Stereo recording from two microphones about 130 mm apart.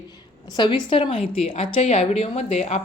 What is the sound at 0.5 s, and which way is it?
A woman's voice, 40° left (ahead or behind).